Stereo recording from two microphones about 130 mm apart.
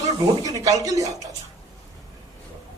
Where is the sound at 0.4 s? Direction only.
25° right (ahead or behind).